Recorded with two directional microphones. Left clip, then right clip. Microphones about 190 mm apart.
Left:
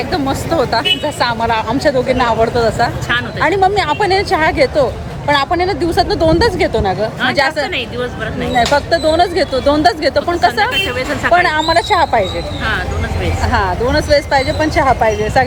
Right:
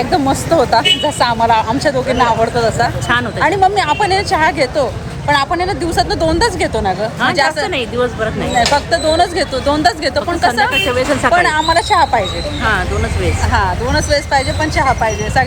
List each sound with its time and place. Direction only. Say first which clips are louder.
0.1 s speech: right 4 dB; 10° left (ahead or behind)
1.8 s speech: even; 25° left (ahead or behind)
7.9 s speech: right 5 dB; 15° right (ahead or behind)
8.5 s speech: left 1 dB; 30° left (ahead or behind)
10.8 s speech: right 2 dB; 5° right (ahead or behind)
11.3 s speech: left 2 dB; 30° left (ahead or behind)
13.5 s speech: left 2 dB; 30° left (ahead or behind)